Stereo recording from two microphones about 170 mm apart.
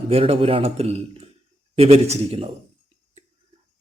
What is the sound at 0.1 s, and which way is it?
Speech, 35° right (ahead or behind).